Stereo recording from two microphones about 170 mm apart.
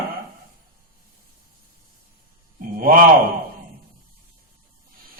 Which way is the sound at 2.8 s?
55° right (ahead or behind).